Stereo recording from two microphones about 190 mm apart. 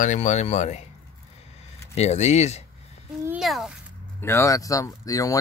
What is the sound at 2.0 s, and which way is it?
Speech, 35° left (ahead or behind).